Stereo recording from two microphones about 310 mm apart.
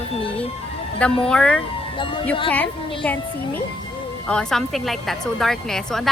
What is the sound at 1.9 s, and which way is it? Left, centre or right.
Speech, centre.